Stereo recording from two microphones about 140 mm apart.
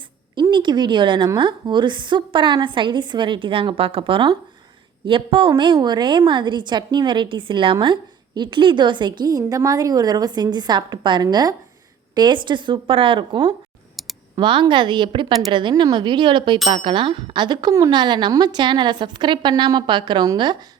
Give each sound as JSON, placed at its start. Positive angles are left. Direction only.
{"t": 0.3, "sound": "a woman's voice", "side_deg": -35}